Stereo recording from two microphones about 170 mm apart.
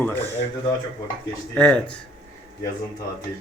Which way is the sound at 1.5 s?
5° left (ahead or behind).